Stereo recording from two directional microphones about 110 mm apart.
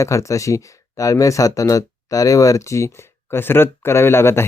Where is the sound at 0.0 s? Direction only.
30° left (ahead or behind).